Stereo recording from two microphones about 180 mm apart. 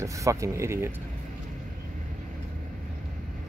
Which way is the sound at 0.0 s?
15° right (ahead or behind).